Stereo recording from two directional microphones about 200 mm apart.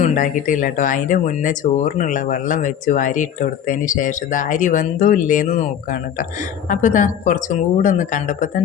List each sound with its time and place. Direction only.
0.0 s speech: 40° left (ahead or behind)